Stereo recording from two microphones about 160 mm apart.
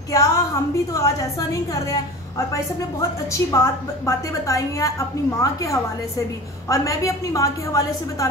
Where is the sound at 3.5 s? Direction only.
15° left (ahead or behind).